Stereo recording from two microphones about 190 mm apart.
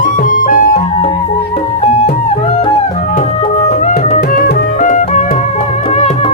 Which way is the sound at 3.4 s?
35° left (ahead or behind).